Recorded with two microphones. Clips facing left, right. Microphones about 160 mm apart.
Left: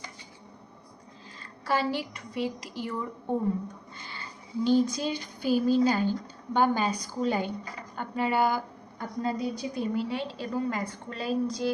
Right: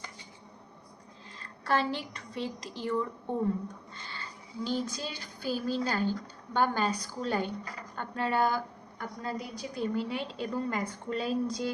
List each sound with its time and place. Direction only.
1.4 s a woman's voice: 5° left (ahead or behind)
3.9 s a sound: 10° left (ahead or behind)
4.6 s speech: 15° left (ahead or behind)
9.0 s a woman's voice: 20° left (ahead or behind)
9.9 s a woman's voice: 5° left (ahead or behind)